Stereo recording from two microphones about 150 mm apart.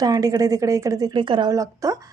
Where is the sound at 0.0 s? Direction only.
25° right (ahead or behind).